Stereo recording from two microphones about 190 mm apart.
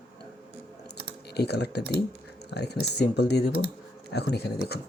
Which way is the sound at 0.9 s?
60° left (ahead or behind).